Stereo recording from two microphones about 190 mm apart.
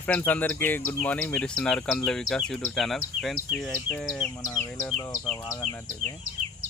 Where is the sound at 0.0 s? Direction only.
10° left (ahead or behind).